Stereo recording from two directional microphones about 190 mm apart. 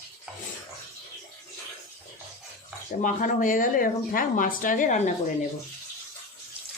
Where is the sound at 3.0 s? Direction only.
45° left (ahead or behind).